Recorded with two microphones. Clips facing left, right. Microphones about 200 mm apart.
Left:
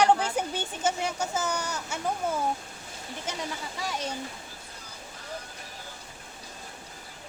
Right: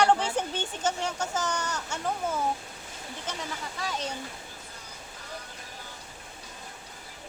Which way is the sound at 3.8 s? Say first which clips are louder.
Even; 10° left (ahead or behind).